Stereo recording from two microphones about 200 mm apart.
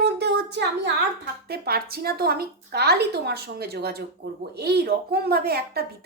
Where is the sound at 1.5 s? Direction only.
50° right (ahead or behind).